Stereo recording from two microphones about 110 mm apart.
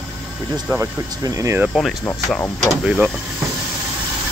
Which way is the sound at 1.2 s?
30° right (ahead or behind).